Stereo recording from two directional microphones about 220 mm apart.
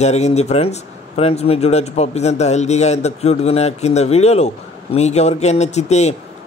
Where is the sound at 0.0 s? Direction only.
30° left (ahead or behind).